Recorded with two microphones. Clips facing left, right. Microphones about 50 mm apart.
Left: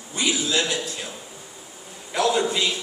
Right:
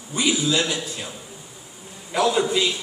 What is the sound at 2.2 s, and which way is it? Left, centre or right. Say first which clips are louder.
Speech: right 1 dB; centre.